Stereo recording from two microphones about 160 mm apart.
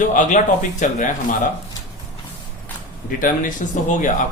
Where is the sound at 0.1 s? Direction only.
50° left (ahead or behind).